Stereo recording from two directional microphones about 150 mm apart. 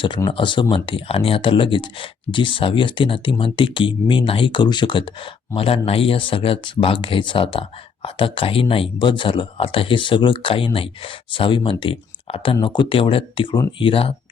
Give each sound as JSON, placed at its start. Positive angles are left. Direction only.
{"t": 0.3, "sound": "speech", "side_deg": 35}